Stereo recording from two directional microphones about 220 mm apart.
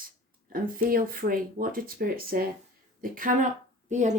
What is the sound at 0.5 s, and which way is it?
Speech, 40° right (ahead or behind).